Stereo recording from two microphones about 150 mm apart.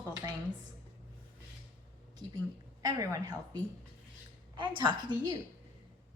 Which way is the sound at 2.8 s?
25° right (ahead or behind).